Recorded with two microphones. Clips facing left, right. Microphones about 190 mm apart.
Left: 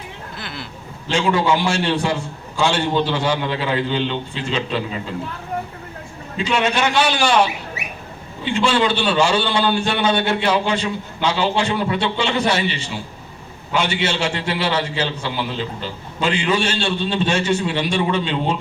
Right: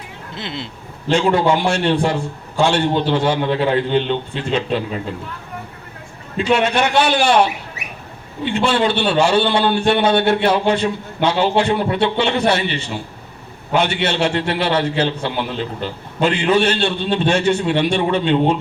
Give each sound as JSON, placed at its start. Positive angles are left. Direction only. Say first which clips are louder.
{"t": 0.3, "sound": "speech", "louder": "right 6 dB", "side_deg": -25}
{"t": 1.1, "sound": "a man's voice", "louder": "right 3 dB", "side_deg": -60}
{"t": 6.3, "sound": "a man's voice", "louder": "right 4 dB", "side_deg": -55}